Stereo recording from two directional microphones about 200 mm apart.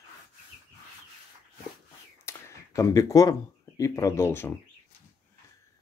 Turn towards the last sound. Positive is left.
turn(degrees=10)  # may be behind; listen again after turning